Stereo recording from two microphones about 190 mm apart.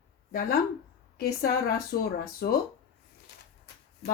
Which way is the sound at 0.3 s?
50° left (ahead or behind).